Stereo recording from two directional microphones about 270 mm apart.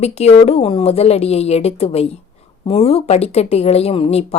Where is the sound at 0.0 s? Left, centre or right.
Left.